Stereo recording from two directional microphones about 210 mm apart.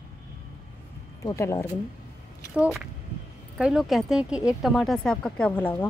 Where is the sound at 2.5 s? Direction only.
Centre (ahead or behind).